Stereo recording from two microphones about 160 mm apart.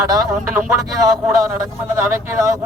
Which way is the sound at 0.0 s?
20° right (ahead or behind).